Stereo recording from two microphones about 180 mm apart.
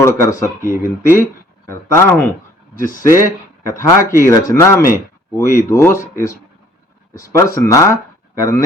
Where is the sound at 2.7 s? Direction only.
50° left (ahead or behind).